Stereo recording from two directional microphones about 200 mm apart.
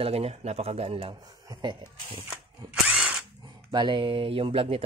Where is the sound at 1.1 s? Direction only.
20° right (ahead or behind).